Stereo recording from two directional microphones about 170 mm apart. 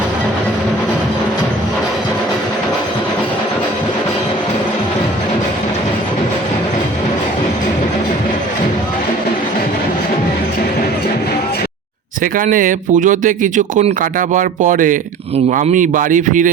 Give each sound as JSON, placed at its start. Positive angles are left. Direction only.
{"t": 12.2, "sound": "speech", "side_deg": -50}